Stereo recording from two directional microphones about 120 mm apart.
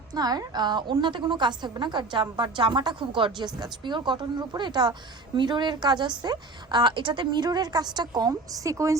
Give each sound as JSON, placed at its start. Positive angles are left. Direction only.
{"t": 0.1, "sound": "a woman's voice", "side_deg": -35}